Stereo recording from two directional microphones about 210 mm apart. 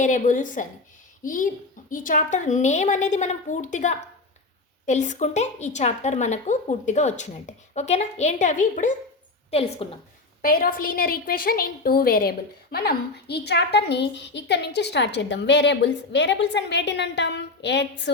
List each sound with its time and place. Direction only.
0.0 s a woman's voice: 35° left (ahead or behind)
10.4 s a woman's voice: 45° left (ahead or behind)